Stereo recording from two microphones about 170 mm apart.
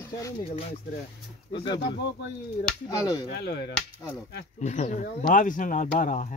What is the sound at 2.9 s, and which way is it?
Speech, 20° left (ahead or behind).